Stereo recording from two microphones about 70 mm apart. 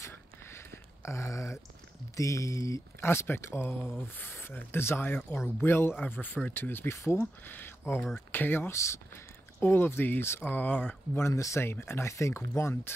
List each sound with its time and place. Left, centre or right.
0.0 s a sound: left
2.1 s speech: left
11.1 s speech: left